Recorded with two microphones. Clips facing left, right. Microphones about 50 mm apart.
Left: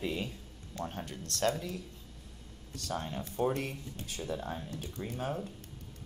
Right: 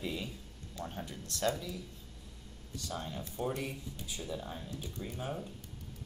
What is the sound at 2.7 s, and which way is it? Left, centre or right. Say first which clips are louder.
Speech: left 3 dB; left.